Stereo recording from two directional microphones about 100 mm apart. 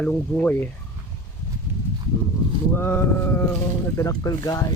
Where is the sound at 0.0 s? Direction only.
15° left (ahead or behind).